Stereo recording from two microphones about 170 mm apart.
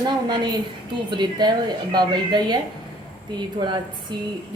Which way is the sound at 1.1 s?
25° right (ahead or behind).